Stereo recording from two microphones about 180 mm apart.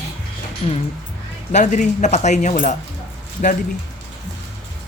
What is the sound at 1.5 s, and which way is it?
Speech, 40° left (ahead or behind).